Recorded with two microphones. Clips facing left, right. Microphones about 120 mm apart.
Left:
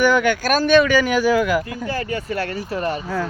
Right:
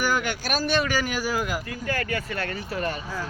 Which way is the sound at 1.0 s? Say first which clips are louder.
Left 10 dB; 80° left.